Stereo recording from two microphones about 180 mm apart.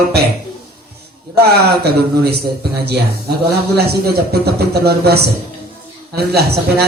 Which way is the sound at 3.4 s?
60° right (ahead or behind).